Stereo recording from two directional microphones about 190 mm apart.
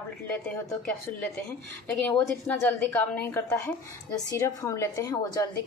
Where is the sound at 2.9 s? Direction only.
10° left (ahead or behind).